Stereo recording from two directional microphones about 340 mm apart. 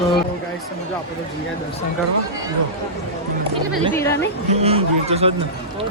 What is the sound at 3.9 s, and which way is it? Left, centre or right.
Speech, centre.